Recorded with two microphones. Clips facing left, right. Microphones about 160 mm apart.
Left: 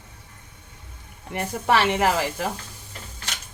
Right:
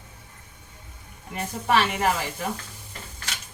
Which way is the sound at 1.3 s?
90° left.